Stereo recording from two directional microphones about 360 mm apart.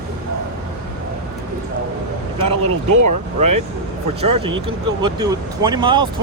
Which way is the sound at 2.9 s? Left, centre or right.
Right.